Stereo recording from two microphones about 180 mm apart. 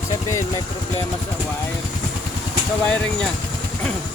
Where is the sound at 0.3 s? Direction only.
15° left (ahead or behind).